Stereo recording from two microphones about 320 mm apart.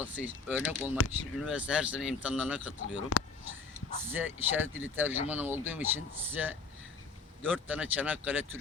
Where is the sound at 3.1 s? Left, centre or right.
Left.